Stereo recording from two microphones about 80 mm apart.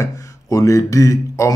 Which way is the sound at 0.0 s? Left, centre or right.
Left.